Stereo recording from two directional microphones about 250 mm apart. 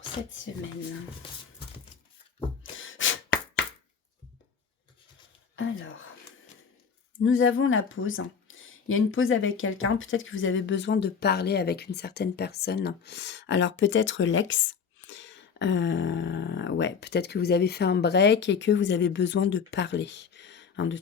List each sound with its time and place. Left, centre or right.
2.7 s beatboxing: left
5.5 s whispering: left
7.3 s speech: left